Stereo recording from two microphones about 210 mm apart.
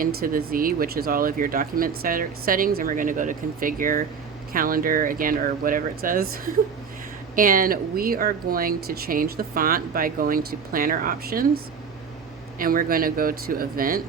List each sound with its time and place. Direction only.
0.0 s speech: 45° right (ahead or behind)
12.5 s speech: 45° right (ahead or behind)